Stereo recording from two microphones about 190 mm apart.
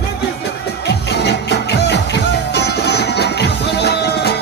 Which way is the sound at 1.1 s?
60° left (ahead or behind).